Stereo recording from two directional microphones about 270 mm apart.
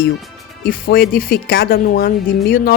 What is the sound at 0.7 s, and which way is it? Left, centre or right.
Speech, left.